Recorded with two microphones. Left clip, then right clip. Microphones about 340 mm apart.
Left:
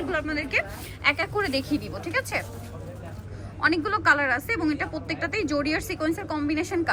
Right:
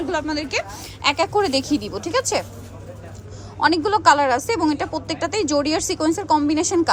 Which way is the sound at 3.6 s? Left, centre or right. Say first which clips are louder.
Right 6 dB; centre.